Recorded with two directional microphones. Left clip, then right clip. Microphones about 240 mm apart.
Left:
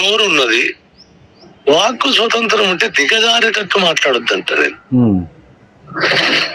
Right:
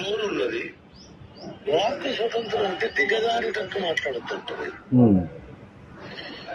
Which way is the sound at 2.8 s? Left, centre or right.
Left.